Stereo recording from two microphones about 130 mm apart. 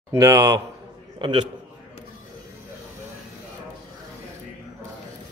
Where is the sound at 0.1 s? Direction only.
25° right (ahead or behind).